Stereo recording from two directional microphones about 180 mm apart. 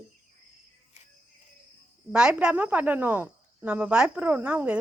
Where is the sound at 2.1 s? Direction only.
5° right (ahead or behind).